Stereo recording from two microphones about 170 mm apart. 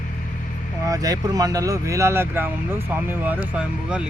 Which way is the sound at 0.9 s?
20° right (ahead or behind).